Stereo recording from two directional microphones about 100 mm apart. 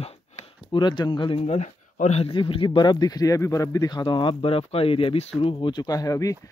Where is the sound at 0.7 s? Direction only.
50° left (ahead or behind).